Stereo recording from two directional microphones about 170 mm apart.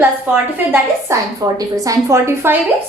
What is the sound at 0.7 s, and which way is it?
A woman's voice, 20° right (ahead or behind).